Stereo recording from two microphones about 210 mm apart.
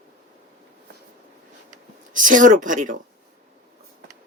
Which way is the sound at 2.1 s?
40° right (ahead or behind).